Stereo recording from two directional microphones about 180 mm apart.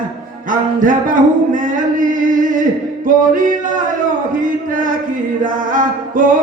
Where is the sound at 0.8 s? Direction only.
50° right (ahead or behind).